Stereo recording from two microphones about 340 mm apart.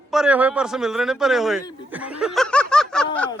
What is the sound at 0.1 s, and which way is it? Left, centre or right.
A man's voice, centre.